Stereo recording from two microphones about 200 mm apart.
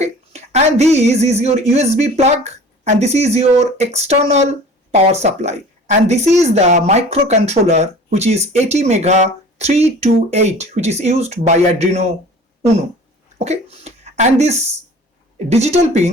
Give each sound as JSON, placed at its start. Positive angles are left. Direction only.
{"t": 0.0, "sound": "speech", "side_deg": -35}
{"t": 13.4, "sound": "speech", "side_deg": -30}